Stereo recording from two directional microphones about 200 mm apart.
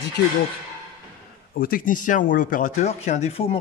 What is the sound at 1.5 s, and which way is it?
Speech, 45° left (ahead or behind).